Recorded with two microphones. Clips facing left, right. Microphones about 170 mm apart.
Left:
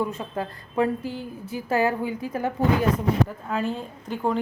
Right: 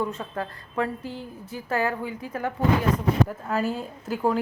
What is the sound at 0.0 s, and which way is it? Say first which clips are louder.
A woman's voice: left 1 dB; 15° left (ahead or behind).